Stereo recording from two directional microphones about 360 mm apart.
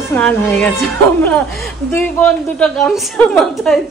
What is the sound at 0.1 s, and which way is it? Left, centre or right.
A woman's voice, centre.